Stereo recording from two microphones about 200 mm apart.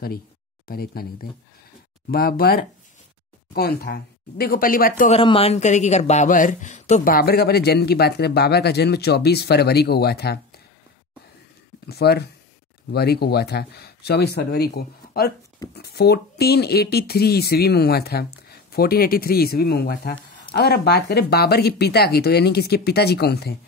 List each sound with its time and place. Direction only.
0.7 s speech: 50° left (ahead or behind)
5.1 s speech: 25° left (ahead or behind); by 10.4 s 55° left (ahead or behind)
11.9 s speech: 55° left (ahead or behind)